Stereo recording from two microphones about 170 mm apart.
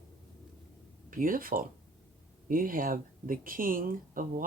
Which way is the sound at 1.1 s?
55° right (ahead or behind).